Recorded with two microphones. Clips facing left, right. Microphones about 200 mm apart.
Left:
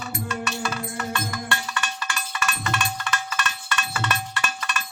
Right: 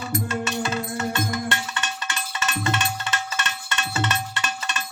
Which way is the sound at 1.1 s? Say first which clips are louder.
Right 3 dB; 25° right (ahead or behind).